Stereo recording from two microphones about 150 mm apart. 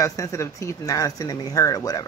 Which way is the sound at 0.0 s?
20° left (ahead or behind).